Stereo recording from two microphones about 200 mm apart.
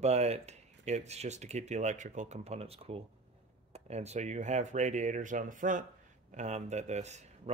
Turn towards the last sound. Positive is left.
turn(degrees=-35)  # may be behind; listen again after turning